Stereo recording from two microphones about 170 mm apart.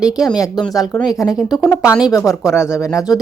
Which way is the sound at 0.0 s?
5° right (ahead or behind).